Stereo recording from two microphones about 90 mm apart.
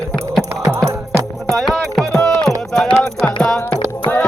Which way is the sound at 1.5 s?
5° left (ahead or behind).